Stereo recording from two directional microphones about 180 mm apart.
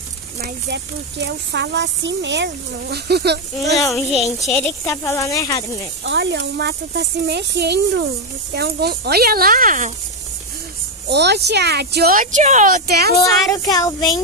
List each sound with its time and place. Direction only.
0.4 s speech: 70° right (ahead or behind)
3.9 s a child's voice: centre (ahead or behind)
4.8 s speech: 15° left (ahead or behind)
6.0 s speech: 80° right; by 9.9 s 45° right (ahead or behind)
11.1 s speech: 70° right (ahead or behind)
13.5 s speech: 20° left (ahead or behind)